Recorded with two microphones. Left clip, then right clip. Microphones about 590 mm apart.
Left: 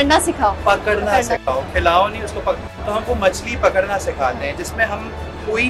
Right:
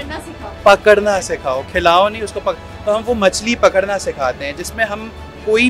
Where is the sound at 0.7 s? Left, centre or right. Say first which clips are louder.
Right 11 dB; right.